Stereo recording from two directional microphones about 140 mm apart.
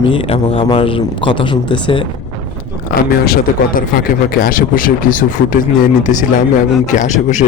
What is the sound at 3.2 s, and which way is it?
Speech, 85° left.